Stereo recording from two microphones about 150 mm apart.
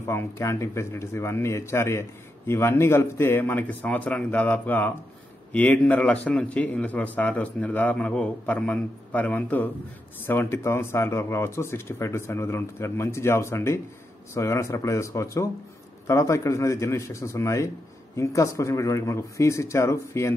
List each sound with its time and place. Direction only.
0.0 s speech: 15° left (ahead or behind)